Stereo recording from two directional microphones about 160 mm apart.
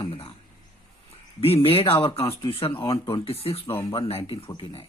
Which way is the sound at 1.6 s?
35° left (ahead or behind).